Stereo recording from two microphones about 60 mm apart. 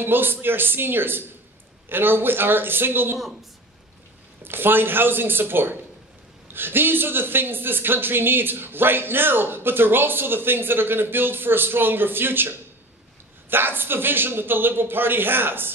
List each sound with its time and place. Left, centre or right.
0.0 s speech: right
4.4 s speech: right